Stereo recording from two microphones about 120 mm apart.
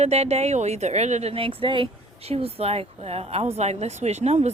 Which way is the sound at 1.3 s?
50° right (ahead or behind).